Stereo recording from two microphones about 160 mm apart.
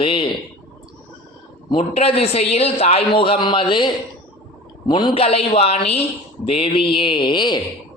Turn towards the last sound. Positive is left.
turn(degrees=30)  # may be behind; listen again after turning